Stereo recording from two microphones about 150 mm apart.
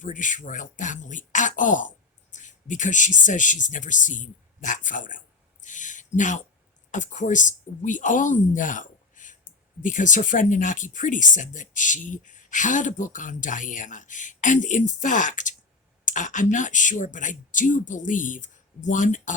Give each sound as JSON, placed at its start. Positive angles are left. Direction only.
{"t": 0.0, "sound": "speech", "side_deg": 60}